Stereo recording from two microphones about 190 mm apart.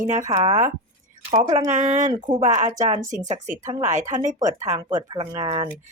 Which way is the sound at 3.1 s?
40° right (ahead or behind).